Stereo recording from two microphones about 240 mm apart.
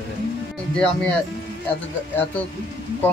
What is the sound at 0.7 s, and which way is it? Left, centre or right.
Speech, centre.